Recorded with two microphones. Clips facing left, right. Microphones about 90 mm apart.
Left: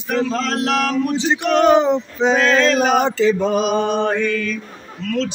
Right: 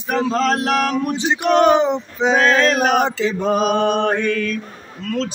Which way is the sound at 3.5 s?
50° right (ahead or behind).